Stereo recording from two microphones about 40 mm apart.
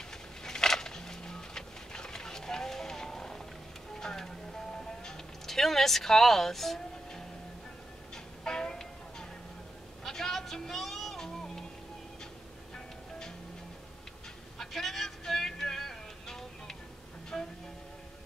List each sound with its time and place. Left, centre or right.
0.4 s music: centre
10.0 s a sound: centre
14.6 s music: centre